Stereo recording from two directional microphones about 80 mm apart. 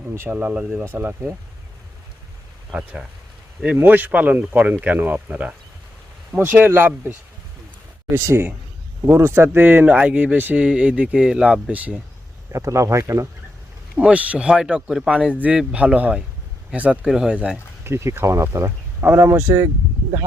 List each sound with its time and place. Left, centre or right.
0.3 s speech: centre
2.7 s speech: centre
3.8 s speech: right
5.3 s speech: centre
6.4 s speech: right; by 11.7 s centre
12.5 s speech: right
13.9 s speech: centre
17.8 s speech: right